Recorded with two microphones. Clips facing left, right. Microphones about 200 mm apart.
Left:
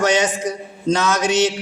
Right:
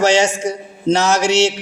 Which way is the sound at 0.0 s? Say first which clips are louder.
Right 3 dB; 30° right (ahead or behind).